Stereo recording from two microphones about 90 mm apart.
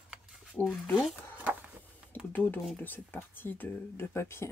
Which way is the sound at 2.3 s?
20° left (ahead or behind).